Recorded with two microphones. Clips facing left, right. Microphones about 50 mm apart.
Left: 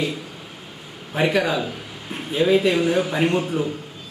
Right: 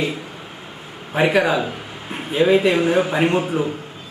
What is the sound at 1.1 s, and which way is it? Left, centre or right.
A man's voice, centre.